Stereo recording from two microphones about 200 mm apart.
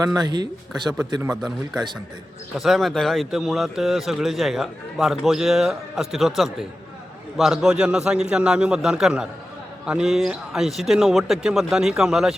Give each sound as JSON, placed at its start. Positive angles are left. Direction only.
{"t": 0.0, "sound": "a man's voice", "side_deg": -20}
{"t": 1.4, "sound": "a man's voice", "side_deg": 0}